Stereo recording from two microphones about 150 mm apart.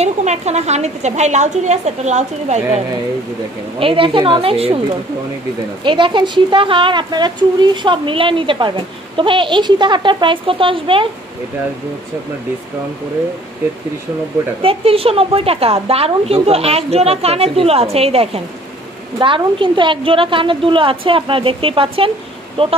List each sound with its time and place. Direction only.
0.0 s a woman's voice: 50° right (ahead or behind)
3.8 s a woman's voice: 35° right (ahead or behind)
5.9 s a woman's voice: 30° right (ahead or behind)
14.6 s a woman's voice: 40° right (ahead or behind)